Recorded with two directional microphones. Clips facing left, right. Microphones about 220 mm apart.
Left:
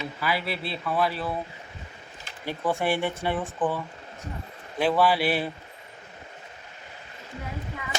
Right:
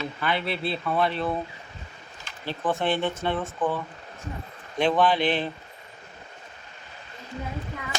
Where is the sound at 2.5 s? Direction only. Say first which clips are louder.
Even; 10° left (ahead or behind).